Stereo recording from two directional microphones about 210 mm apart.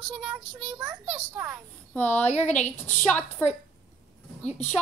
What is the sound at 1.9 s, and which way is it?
A woman's voice, 10° left (ahead or behind).